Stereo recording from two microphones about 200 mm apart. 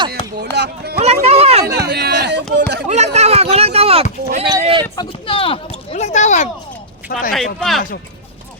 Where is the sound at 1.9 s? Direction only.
55° right (ahead or behind).